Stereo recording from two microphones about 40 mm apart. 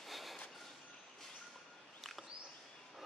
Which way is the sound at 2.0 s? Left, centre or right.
Centre.